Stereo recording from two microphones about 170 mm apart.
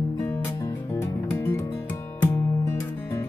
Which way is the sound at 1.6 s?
20° left (ahead or behind).